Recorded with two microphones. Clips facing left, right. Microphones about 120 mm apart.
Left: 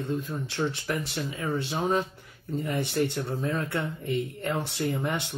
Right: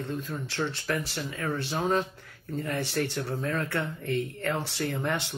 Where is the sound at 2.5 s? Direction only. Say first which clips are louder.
Left 2 dB; 20° left (ahead or behind).